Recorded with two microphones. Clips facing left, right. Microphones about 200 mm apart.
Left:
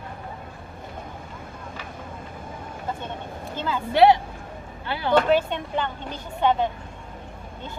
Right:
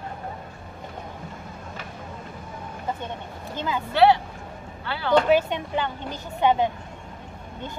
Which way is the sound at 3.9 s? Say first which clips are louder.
Left 2 dB; 20° left (ahead or behind).